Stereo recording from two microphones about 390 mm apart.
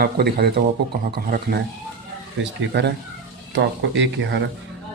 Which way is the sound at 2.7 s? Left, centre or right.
Right.